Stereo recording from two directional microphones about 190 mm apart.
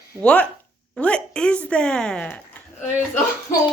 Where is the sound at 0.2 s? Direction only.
5° left (ahead or behind).